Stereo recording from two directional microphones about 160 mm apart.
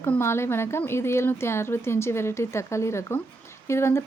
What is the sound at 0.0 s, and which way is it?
Speech, 15° left (ahead or behind).